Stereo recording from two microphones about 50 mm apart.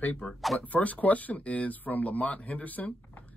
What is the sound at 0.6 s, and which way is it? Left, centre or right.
Speech, left.